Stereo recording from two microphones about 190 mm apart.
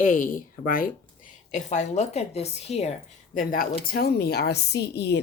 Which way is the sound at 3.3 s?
45° left (ahead or behind).